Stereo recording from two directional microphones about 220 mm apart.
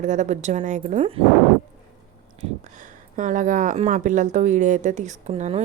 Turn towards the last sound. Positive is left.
turn(degrees=-30)  # may be behind; listen again after turning